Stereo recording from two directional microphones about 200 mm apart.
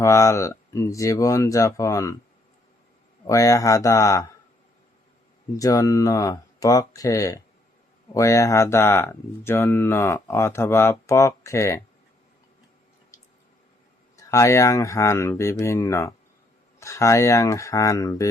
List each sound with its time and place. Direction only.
0.0 s speech: 15° left (ahead or behind)
3.2 s speech: 15° left (ahead or behind)
5.5 s speech: 15° left (ahead or behind)
14.2 s speech: 15° left (ahead or behind)